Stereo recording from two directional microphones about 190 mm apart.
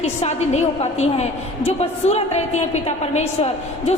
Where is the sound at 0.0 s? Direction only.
35° left (ahead or behind).